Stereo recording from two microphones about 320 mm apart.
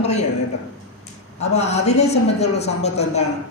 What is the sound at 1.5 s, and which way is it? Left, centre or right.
Speech, left.